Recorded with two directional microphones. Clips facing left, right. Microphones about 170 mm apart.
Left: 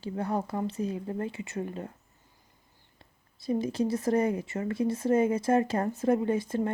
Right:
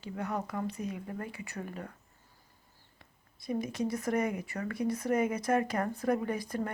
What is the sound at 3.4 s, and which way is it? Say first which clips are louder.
Speech: left 5 dB; 30° left (ahead or behind).